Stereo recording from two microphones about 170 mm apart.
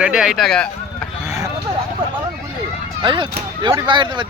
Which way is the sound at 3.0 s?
30° right (ahead or behind).